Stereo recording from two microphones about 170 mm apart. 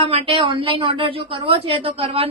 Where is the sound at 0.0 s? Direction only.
35° right (ahead or behind).